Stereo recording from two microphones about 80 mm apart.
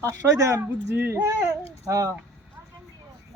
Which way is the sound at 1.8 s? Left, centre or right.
Right.